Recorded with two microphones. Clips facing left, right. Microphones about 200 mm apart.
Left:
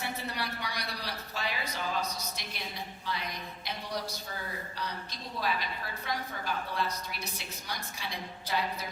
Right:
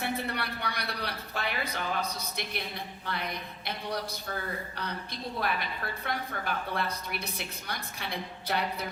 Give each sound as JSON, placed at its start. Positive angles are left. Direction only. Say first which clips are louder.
{"t": 0.0, "sound": "a woman's voice", "louder": "right 4 dB", "side_deg": -60}
{"t": 5.4, "sound": "a woman's voice", "louder": "even", "side_deg": -60}